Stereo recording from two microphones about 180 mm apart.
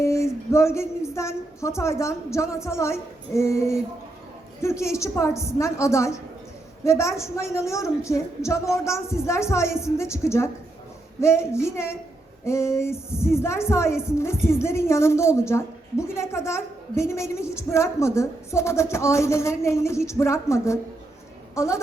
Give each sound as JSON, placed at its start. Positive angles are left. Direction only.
{"t": 0.0, "sound": "a woman's voice", "side_deg": 15}